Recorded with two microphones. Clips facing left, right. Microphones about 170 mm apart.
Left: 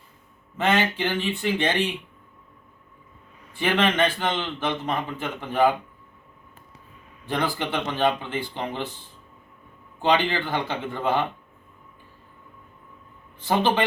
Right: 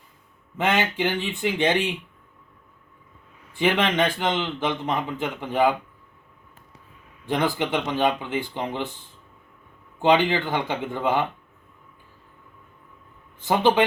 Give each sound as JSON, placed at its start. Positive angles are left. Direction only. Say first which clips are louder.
{"t": 0.5, "sound": "a man's voice", "louder": "left 1 dB", "side_deg": -15}
{"t": 3.5, "sound": "a man's voice", "louder": "right 1 dB", "side_deg": -15}
{"t": 7.5, "sound": "a man's voice", "louder": "right 3 dB", "side_deg": -15}
{"t": 10.0, "sound": "a man's voice", "louder": "right 3 dB", "side_deg": -15}
{"t": 13.5, "sound": "a man's voice", "louder": "right 3 dB", "side_deg": -15}